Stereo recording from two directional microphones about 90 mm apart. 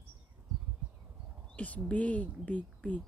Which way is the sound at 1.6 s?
15° left (ahead or behind).